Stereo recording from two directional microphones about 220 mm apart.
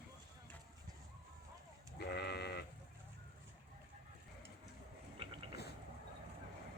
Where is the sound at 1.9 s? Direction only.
45° left (ahead or behind).